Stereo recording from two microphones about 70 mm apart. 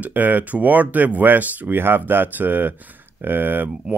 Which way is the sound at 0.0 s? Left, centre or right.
Right.